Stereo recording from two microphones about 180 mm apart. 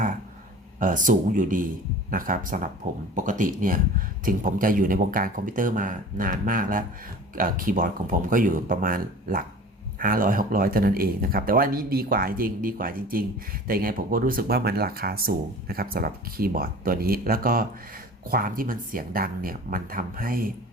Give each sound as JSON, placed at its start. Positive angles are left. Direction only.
{"t": 0.8, "sound": "speech", "side_deg": -45}